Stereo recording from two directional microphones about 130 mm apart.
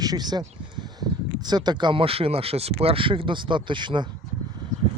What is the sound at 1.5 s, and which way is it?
Speech, 35° right (ahead or behind).